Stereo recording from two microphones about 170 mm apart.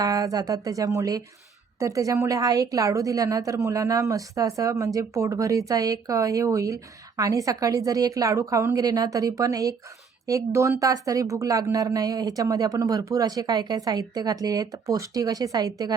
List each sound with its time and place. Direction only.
0.0 s speech: 20° right (ahead or behind)